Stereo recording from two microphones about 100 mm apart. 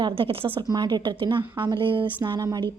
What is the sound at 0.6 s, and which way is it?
Speech, 45° right (ahead or behind).